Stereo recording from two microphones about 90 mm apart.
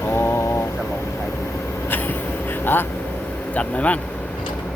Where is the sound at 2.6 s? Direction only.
25° left (ahead or behind).